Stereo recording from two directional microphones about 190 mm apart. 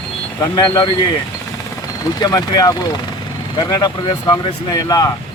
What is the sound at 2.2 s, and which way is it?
Speech, 20° left (ahead or behind).